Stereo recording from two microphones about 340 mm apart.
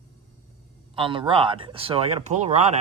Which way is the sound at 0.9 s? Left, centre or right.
Centre.